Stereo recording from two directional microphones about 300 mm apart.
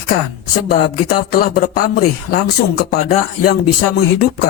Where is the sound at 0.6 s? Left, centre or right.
Left.